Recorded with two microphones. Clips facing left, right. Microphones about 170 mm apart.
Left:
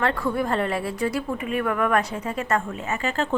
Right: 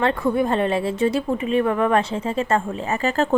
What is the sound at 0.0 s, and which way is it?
Speech, 20° right (ahead or behind).